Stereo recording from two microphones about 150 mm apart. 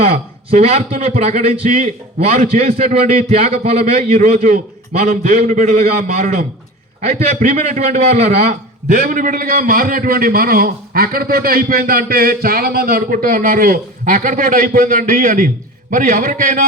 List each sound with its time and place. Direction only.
0.0 s speech: 50° right (ahead or behind)
0.9 s a man's voice: 65° right (ahead or behind); by 9.0 s 50° right (ahead or behind)
9.0 s a man's voice: 65° right (ahead or behind)